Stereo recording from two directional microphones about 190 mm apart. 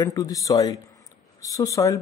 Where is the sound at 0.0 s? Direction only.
20° left (ahead or behind).